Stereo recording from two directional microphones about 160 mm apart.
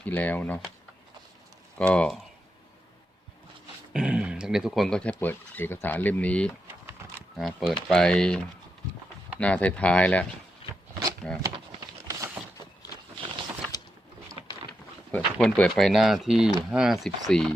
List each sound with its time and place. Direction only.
0.0 s speech: 10° left (ahead or behind)
1.9 s speech: 5° left (ahead or behind)
3.9 s speech: 5° right (ahead or behind)
9.4 s speech: 10° left (ahead or behind)
10.6 s shuffling cards: 35° left (ahead or behind)
11.4 s a sound: 20° right (ahead or behind)
15.1 s speech: 10° left (ahead or behind)